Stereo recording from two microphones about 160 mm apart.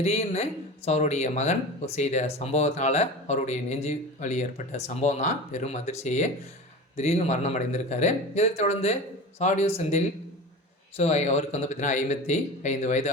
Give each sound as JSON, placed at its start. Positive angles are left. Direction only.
{"t": 0.0, "sound": "speech", "side_deg": 40}